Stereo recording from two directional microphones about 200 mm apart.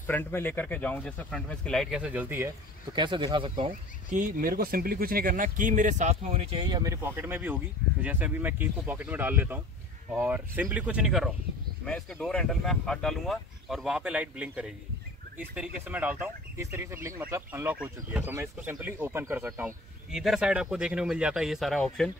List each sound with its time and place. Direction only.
0.0 s speech: 10° left (ahead or behind); by 2.5 s 10° right (ahead or behind)
2.9 s speech: 20° right (ahead or behind)
4.1 s speech: 45° right (ahead or behind)
6.6 s speech: 20° right (ahead or behind); by 22.1 s 5° left (ahead or behind)